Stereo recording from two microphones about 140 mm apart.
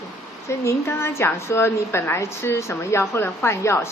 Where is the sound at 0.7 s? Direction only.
15° left (ahead or behind).